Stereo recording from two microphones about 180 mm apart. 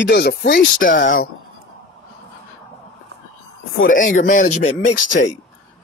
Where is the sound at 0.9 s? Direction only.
90° left.